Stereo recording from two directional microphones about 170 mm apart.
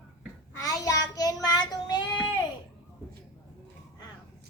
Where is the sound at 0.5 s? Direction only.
20° left (ahead or behind).